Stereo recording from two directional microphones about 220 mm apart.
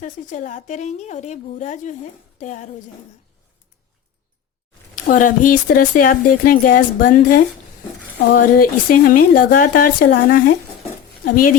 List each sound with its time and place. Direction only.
0.0 s speech: 35° left (ahead or behind)
4.9 s speech: 35° left (ahead or behind)